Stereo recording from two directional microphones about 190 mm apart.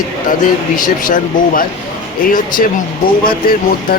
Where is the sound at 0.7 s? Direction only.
45° left (ahead or behind).